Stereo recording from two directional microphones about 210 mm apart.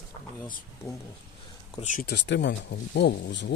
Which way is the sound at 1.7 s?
35° left (ahead or behind).